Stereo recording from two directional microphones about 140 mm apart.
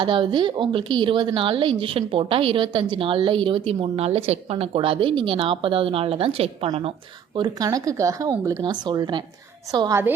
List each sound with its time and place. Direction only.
0.0 s a woman's voice: 35° right (ahead or behind)
7.3 s speech: 30° right (ahead or behind)